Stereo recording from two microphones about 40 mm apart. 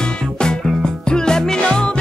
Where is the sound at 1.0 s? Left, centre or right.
Centre.